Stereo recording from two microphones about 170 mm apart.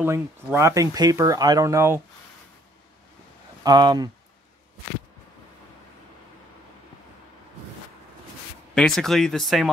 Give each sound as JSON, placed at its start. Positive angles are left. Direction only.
{"t": 0.0, "sound": "speech", "side_deg": -15}
{"t": 3.6, "sound": "speech", "side_deg": -25}
{"t": 8.7, "sound": "speech", "side_deg": 5}